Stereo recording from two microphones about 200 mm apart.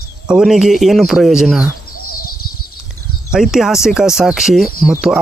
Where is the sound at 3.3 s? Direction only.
Centre (ahead or behind).